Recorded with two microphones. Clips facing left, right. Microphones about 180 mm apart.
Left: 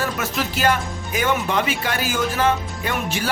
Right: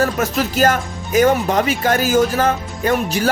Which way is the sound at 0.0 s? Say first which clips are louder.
Right 6 dB; 40° right (ahead or behind).